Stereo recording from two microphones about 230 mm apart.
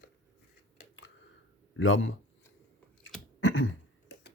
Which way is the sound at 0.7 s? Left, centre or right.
Left.